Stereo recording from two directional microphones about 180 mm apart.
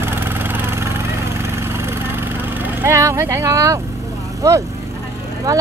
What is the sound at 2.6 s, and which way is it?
Vehicle, 15° right (ahead or behind).